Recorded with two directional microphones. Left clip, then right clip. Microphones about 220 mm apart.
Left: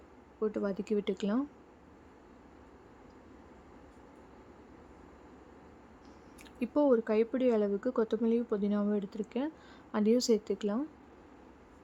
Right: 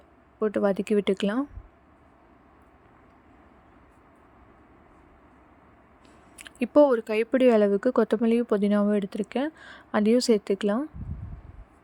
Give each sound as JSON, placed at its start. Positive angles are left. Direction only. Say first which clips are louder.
{"t": 0.3, "sound": "speech", "louder": "right 9 dB", "side_deg": -30}
{"t": 6.4, "sound": "speech", "louder": "right 11 dB", "side_deg": -25}